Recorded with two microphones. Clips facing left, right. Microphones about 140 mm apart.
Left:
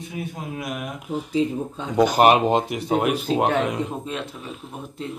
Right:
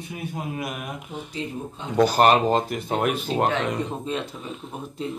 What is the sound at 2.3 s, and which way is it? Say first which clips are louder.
Speech: left 1 dB; 5° left (ahead or behind).